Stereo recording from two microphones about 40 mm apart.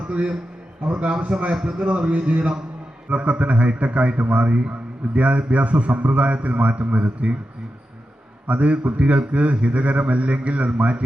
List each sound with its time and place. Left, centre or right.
0.9 s a man's voice: right
1.3 s a man's voice: centre; by 7.3 s right
8.4 s a man's voice: right